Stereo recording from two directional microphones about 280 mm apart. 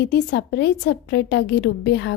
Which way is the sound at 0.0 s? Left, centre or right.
Left.